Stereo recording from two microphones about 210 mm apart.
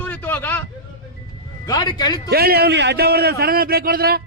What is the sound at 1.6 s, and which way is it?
Speech, 20° left (ahead or behind).